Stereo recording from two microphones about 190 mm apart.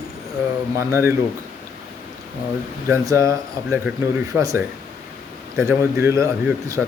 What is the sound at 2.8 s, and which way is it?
Speech, 15° right (ahead or behind).